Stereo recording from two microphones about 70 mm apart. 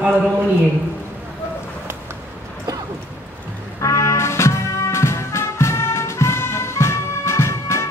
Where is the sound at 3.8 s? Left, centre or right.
Left.